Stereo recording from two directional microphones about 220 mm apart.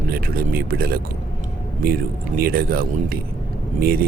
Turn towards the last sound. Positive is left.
turn(degrees=-40)  # may be behind; listen again after turning